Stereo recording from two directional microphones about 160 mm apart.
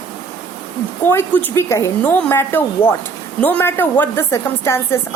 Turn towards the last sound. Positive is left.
turn(degrees=15)  # may be behind; listen again after turning